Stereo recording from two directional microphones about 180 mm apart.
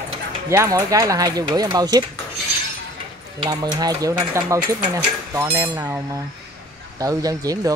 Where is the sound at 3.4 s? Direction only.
20° right (ahead or behind).